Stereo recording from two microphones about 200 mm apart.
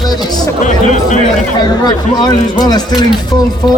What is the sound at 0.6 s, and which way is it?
Speech, 40° left (ahead or behind).